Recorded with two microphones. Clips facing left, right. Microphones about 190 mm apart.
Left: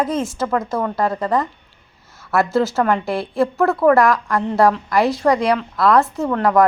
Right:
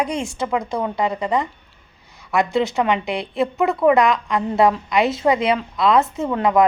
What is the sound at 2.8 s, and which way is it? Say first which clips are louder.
A woman's voice: left 2 dB; 20° right (ahead or behind).